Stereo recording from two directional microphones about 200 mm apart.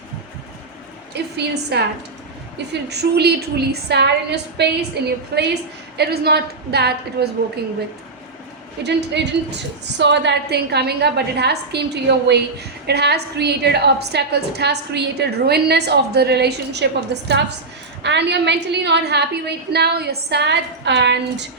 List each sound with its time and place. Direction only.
1.2 s a sound: 55° right (ahead or behind)
1.7 s a woman's voice: 55° right (ahead or behind)
2.9 s a woman's voice: 55° right (ahead or behind)
8.8 s a woman's voice: 55° right (ahead or behind)